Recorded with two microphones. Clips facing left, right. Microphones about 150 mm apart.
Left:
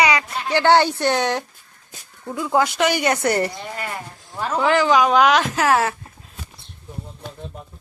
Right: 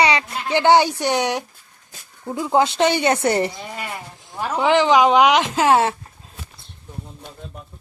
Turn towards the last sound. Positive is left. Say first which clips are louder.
# right 2 dB
turn(degrees=-25)  # may be behind; listen again after turning